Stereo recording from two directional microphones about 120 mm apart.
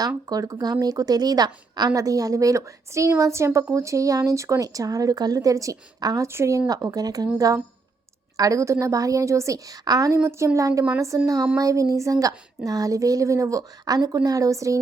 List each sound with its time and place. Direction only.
0.3 s a woman's voice: 30° right (ahead or behind)